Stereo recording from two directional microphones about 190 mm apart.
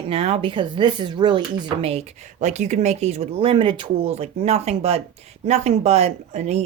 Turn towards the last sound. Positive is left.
turn(degrees=-35)  # may be behind; listen again after turning